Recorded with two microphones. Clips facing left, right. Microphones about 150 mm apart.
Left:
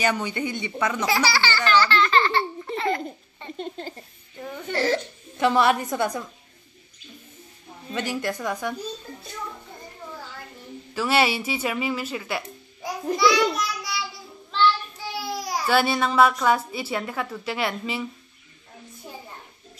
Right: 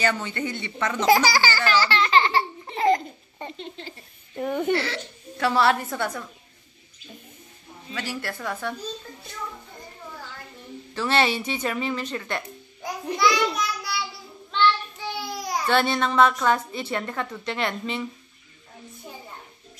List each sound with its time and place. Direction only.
0.0 s speech: 15° left (ahead or behind)
1.0 s speech: 45° right (ahead or behind)
1.9 s baby laughter: 30° right (ahead or behind)
3.5 s toothbrush: 45° left (ahead or behind)
4.4 s speech: 60° right (ahead or behind)
4.7 s speech: 45° left (ahead or behind)
5.4 s speech: 20° left (ahead or behind)
7.9 s speech: 20° left (ahead or behind)
11.0 s speech: 10° left (ahead or behind)